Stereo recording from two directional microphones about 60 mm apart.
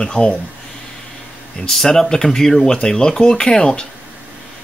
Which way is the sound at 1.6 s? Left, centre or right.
Centre.